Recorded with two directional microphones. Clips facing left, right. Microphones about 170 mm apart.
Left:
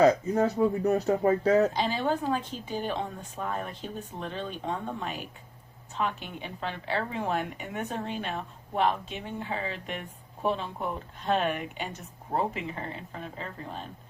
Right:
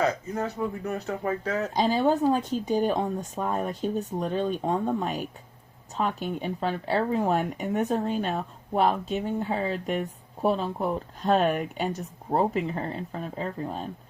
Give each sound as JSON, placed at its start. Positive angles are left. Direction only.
{"t": 0.4, "sound": "speech", "side_deg": 40}
{"t": 1.7, "sound": "speech", "side_deg": -40}